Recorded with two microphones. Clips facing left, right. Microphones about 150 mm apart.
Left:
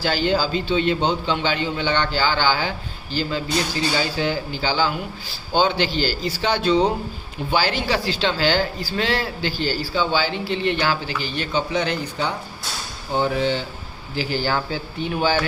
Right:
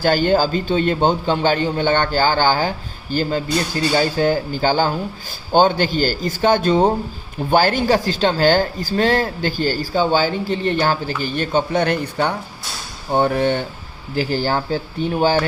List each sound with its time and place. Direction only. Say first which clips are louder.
0.0 s a man's voice: right 5 dB; 50° right (ahead or behind)
14.2 s a man's voice: right 3 dB; 45° right (ahead or behind)